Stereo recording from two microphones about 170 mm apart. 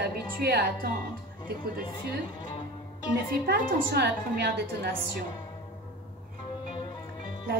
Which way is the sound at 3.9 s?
75° right (ahead or behind).